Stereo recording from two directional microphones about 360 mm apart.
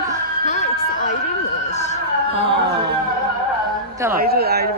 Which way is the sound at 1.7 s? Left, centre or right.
Centre.